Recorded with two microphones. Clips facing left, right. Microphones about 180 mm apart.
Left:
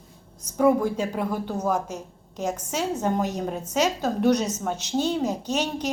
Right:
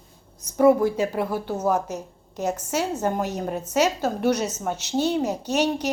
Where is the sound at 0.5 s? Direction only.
5° right (ahead or behind).